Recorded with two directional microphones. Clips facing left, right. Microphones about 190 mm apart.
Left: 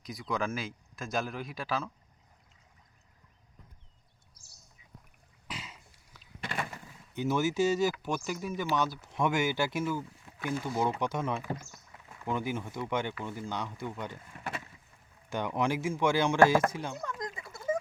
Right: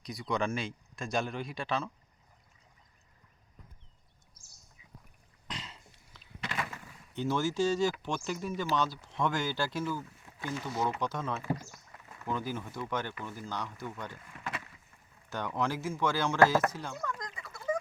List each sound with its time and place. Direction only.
0.0 s speech: centre (ahead or behind)
5.5 s a sound: 10° left (ahead or behind)
7.2 s speech: 10° left (ahead or behind); by 17.7 s 25° left (ahead or behind)